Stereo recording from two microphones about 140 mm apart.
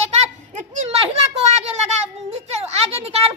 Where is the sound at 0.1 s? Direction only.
50° right (ahead or behind).